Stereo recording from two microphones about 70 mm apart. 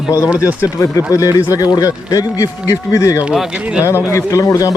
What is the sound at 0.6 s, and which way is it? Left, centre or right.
Speech, left.